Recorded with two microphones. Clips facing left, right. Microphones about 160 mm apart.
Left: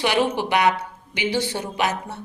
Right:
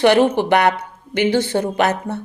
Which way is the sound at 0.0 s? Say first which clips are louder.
Right 8 dB; 55° right (ahead or behind).